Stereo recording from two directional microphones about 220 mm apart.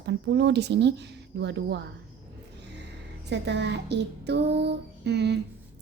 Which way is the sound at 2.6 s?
50° right (ahead or behind).